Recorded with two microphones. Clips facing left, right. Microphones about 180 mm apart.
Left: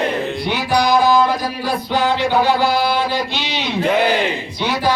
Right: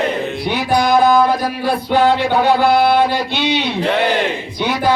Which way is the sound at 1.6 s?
55° right (ahead or behind).